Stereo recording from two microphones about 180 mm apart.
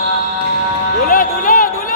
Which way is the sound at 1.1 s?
50° left (ahead or behind).